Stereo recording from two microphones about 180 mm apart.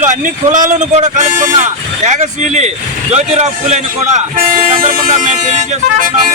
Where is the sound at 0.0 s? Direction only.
45° right (ahead or behind).